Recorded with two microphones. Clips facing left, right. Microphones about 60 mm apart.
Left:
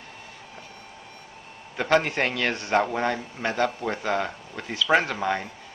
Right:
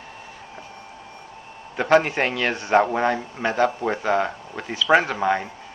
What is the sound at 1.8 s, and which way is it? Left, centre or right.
Speech, centre.